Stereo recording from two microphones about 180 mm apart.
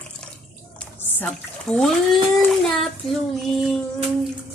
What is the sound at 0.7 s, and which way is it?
Bathtub, 10° left (ahead or behind).